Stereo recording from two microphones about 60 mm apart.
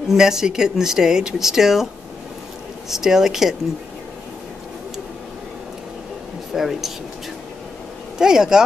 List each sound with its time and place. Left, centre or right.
0.1 s speech: centre
2.9 s speech: centre
6.5 s speech: centre
8.2 s speech: centre